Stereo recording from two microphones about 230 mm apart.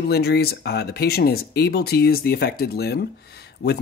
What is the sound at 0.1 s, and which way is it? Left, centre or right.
Speech, left.